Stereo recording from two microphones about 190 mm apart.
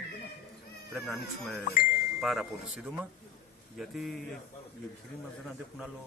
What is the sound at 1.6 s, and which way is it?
Speech, 50° left (ahead or behind).